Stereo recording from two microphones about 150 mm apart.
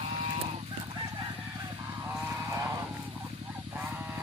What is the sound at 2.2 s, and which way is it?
Vehicle, 20° right (ahead or behind).